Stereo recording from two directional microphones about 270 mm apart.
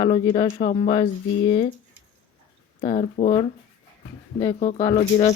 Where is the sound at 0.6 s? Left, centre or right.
Left.